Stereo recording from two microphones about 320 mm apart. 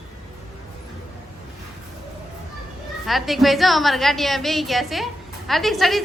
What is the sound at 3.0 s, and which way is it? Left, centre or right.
A woman's voice, centre.